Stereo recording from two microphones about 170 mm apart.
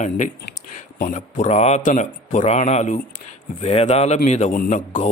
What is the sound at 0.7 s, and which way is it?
A man's voice, 50° left (ahead or behind).